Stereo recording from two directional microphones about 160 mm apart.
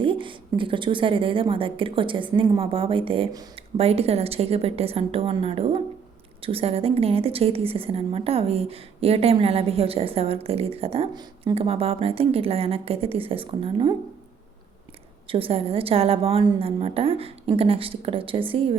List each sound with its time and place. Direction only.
0.0 s a woman's voice: 30° right (ahead or behind)
11.5 s a woman's voice: 35° right (ahead or behind)
15.3 s a woman's voice: 35° right (ahead or behind)